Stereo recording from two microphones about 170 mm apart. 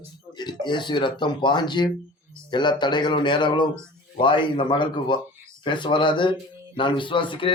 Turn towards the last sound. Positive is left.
turn(degrees=30)  # may be behind; listen again after turning